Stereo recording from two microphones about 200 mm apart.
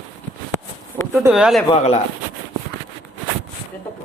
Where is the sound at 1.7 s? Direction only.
30° left (ahead or behind).